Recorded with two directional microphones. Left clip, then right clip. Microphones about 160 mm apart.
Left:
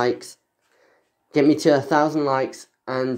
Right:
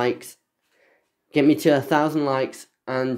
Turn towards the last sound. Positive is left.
turn(degrees=-20)  # may be behind; listen again after turning